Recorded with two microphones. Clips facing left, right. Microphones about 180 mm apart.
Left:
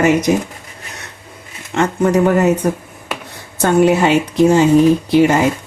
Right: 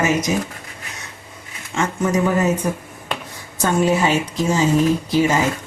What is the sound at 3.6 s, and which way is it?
Speech, 65° left (ahead or behind).